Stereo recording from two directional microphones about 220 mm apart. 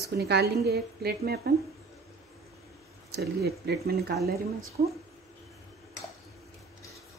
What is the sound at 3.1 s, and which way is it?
A woman's voice, 45° right (ahead or behind).